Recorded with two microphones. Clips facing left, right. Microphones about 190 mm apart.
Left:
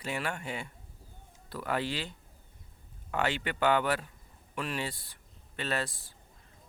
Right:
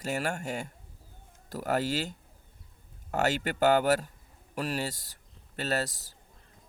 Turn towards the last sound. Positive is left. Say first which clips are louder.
# right 3 dB
turn(degrees=-40)  # may be behind; listen again after turning